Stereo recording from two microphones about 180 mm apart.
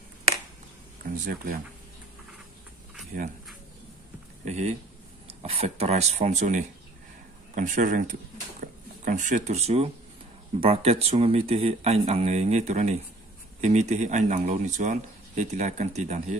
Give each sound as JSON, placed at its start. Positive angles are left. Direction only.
{"t": 1.0, "sound": "speech", "side_deg": -50}
{"t": 4.5, "sound": "speech", "side_deg": -40}